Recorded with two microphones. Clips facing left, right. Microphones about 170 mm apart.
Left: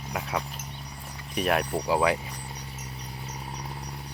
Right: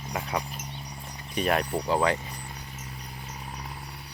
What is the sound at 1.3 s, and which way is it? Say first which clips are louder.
Speech: even; centre (ahead or behind).